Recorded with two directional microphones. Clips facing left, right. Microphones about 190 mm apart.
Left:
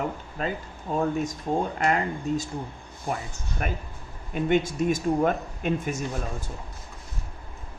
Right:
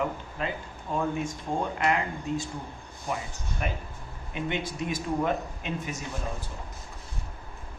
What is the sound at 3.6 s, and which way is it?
Speech, 50° left (ahead or behind).